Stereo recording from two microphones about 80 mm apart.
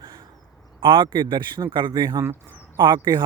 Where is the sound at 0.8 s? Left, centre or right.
Right.